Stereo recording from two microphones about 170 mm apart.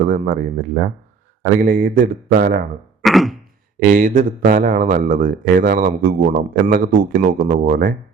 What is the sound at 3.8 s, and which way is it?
Speech, 50° right (ahead or behind).